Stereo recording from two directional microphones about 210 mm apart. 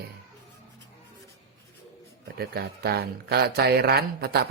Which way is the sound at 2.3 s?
50° right (ahead or behind).